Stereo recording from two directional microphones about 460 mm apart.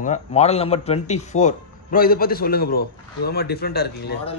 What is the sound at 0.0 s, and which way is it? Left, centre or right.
A man's voice, centre.